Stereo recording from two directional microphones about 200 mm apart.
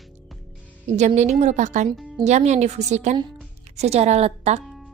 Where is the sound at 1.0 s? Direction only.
35° right (ahead or behind).